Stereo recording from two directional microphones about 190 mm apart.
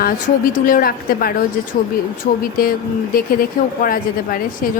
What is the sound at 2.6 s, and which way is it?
A woman's voice, 50° left (ahead or behind).